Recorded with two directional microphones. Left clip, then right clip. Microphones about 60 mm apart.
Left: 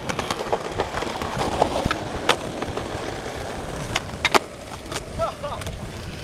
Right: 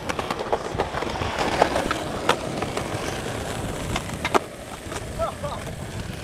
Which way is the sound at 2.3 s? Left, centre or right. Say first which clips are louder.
Left 1 dB; centre.